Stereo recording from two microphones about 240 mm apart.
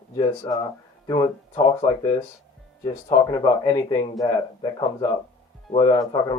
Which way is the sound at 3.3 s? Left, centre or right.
Centre.